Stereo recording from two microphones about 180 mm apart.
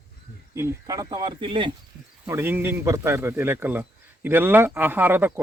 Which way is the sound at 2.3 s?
15° right (ahead or behind).